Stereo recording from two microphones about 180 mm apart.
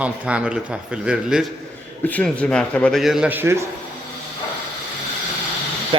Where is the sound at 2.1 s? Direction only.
5° left (ahead or behind); by 3.6 s 15° right (ahead or behind).